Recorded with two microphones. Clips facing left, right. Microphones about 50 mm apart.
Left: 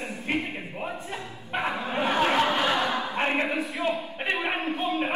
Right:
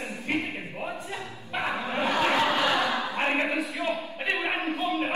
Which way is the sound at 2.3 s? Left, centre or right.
Left.